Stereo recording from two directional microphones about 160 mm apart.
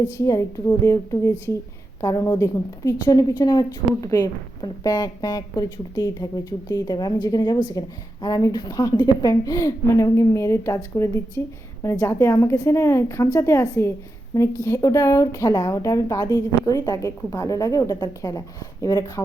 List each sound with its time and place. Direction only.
0.2 s a woman's voice: 20° left (ahead or behind)